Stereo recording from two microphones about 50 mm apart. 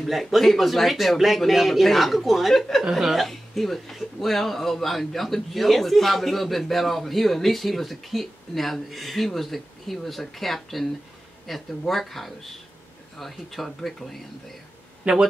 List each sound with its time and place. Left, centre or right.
0.0 s a man's voice: centre
15.0 s speech: right